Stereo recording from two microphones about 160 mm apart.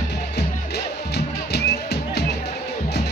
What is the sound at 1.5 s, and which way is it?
Music, 90° left.